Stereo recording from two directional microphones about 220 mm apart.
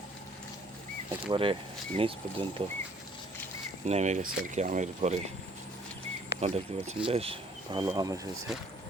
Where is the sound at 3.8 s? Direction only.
30° right (ahead or behind).